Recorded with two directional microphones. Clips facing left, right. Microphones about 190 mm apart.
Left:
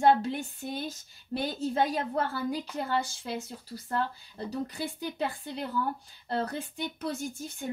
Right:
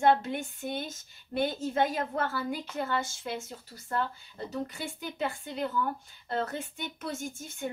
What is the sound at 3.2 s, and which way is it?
Speech, 35° left (ahead or behind).